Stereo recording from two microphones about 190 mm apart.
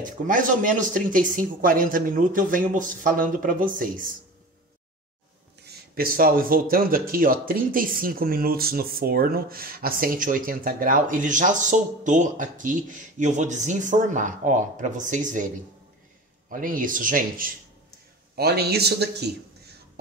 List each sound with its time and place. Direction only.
0.0 s speech: 45° right (ahead or behind)
5.7 s speech: 50° right (ahead or behind)